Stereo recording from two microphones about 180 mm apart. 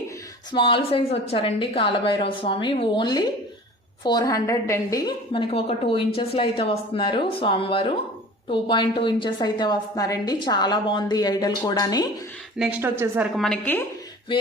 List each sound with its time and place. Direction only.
0.5 s a woman's voice: 30° left (ahead or behind)
12.5 s a woman's voice: 5° right (ahead or behind)
13.3 s a woman's voice: 5° left (ahead or behind)